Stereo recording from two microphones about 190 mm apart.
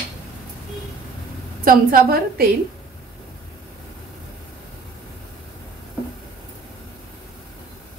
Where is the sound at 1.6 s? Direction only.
50° right (ahead or behind).